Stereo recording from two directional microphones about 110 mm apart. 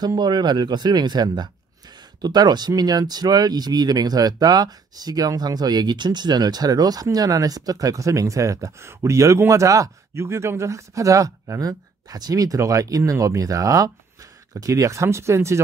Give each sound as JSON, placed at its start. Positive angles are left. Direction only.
{"t": 0.0, "sound": "speech", "side_deg": -40}